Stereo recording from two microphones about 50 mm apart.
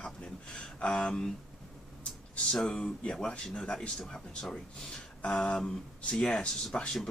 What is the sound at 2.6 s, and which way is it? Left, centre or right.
Speech, centre.